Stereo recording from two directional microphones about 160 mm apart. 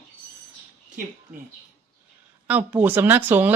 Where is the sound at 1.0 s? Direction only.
60° right (ahead or behind).